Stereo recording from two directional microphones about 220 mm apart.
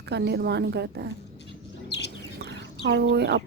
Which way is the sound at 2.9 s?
50° right (ahead or behind).